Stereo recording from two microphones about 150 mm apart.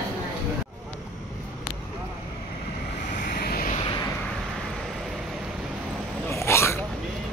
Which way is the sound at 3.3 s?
90° left.